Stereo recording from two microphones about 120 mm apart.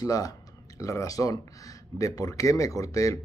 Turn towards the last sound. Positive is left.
turn(degrees=25)  # may be behind; listen again after turning